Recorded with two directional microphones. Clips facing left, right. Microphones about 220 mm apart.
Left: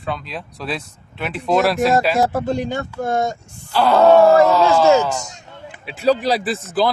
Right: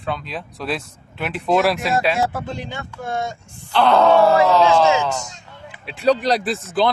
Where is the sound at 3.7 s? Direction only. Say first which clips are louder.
Left 2 dB; 5° left (ahead or behind).